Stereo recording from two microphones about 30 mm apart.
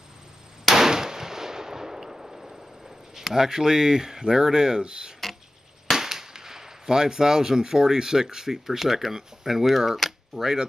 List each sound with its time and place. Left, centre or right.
0.7 s gunshot: centre
3.3 s speech: centre
5.9 s cap gun: centre